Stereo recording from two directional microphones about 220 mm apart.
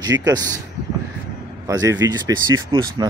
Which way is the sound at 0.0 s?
15° right (ahead or behind).